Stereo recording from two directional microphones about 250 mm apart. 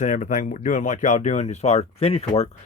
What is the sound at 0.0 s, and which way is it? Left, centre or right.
Speech, left.